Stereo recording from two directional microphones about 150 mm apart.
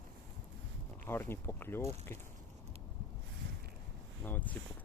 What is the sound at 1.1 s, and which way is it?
Speech, 15° left (ahead or behind).